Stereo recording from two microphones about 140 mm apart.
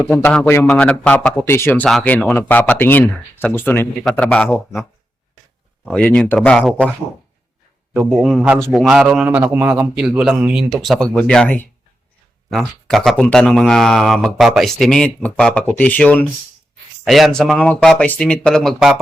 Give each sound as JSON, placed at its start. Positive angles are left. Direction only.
{"t": 0.1, "sound": "speech", "side_deg": 5}
{"t": 0.4, "sound": "speech", "side_deg": 15}
{"t": 5.8, "sound": "speech", "side_deg": 10}
{"t": 7.9, "sound": "a man's voice", "side_deg": -5}
{"t": 17.1, "sound": "speech", "side_deg": 0}